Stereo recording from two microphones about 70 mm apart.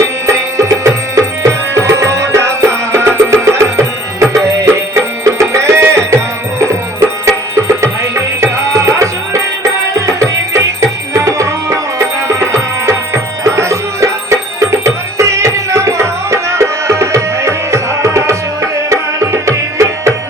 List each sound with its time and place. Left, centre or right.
0.0 s music: right
7.3 s music: right